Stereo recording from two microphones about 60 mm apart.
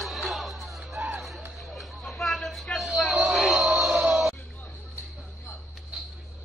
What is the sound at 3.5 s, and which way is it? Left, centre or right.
Music, centre.